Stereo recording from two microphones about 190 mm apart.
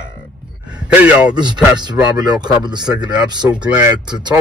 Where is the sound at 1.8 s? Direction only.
25° right (ahead or behind).